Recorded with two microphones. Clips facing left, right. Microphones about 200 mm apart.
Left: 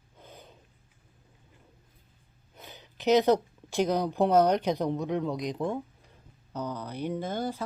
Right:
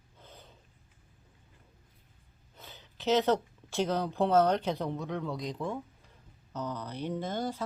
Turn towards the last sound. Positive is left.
turn(degrees=10)  # may be behind; listen again after turning